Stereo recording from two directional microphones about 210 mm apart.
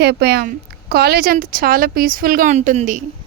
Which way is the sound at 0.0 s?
50° right (ahead or behind).